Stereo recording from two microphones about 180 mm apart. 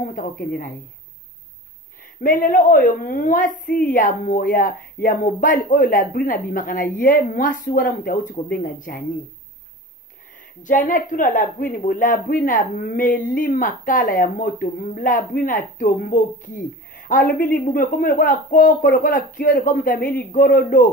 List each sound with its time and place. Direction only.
0.0 s speech: 50° left (ahead or behind)
2.2 s speech: 50° left (ahead or behind)
10.6 s speech: 45° left (ahead or behind)